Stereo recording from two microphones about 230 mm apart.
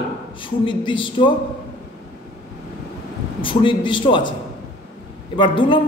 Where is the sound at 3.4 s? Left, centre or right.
Left.